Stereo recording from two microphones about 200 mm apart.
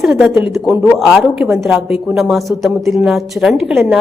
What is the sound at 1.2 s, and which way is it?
A woman's voice, 5° right (ahead or behind).